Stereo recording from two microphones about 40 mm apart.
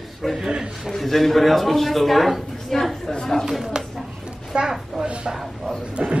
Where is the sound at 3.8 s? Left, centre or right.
Right.